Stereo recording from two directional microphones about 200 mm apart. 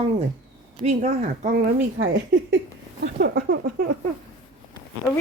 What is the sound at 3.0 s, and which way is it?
Speech, 50° right (ahead or behind).